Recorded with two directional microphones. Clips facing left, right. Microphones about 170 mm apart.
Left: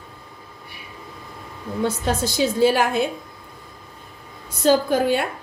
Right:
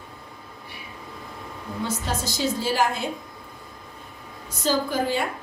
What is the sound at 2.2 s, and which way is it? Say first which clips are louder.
Speech: left 9 dB; 60° left (ahead or behind).